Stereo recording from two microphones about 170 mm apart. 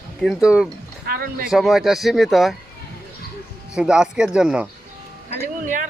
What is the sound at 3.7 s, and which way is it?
Speech, 5° right (ahead or behind).